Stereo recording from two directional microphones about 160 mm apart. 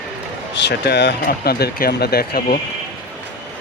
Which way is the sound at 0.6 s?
90° left.